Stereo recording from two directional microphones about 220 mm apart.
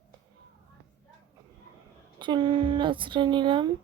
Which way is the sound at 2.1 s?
20° right (ahead or behind).